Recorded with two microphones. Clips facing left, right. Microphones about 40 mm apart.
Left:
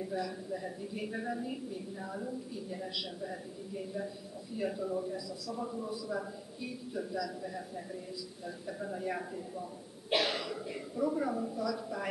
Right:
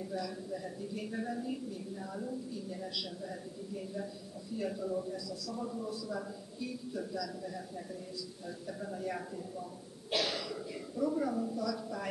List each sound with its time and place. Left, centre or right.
0.0 s a woman's voice: centre